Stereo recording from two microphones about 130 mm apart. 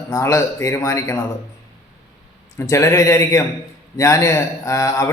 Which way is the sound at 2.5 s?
20° left (ahead or behind).